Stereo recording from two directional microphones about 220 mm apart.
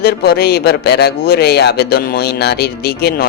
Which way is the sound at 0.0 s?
45° left (ahead or behind).